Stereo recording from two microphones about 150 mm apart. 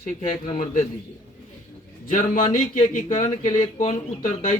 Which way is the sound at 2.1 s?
55° left (ahead or behind).